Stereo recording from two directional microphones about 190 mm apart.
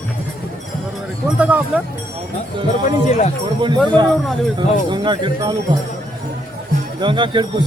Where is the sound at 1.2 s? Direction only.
5° right (ahead or behind).